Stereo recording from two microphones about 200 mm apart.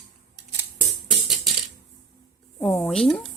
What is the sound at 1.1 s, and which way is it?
Music, centre (ahead or behind).